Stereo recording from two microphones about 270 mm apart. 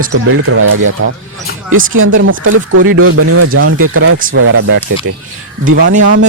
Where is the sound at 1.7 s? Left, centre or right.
Right.